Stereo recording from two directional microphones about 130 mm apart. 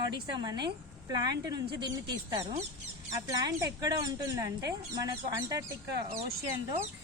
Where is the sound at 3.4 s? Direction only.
30° right (ahead or behind).